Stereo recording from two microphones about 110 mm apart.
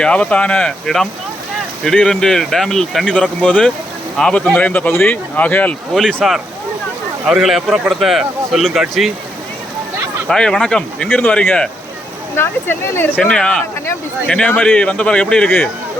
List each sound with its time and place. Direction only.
0.0 s a man's voice: 10° left (ahead or behind)
5.9 s a man's voice: 5° left (ahead or behind)
10.2 s speech: 5° left (ahead or behind)
12.4 s speech: 20° left (ahead or behind)